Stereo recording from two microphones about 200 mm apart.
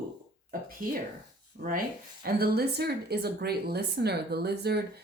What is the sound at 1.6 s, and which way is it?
Speech, 45° right (ahead or behind).